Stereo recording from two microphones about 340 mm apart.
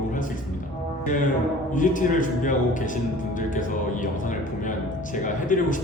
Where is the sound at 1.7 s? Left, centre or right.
Left.